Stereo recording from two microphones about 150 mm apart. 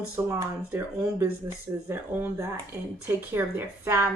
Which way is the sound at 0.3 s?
15° right (ahead or behind).